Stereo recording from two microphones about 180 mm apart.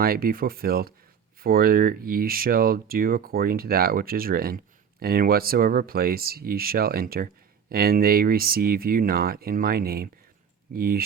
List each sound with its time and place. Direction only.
0.0 s speech: 55° right (ahead or behind)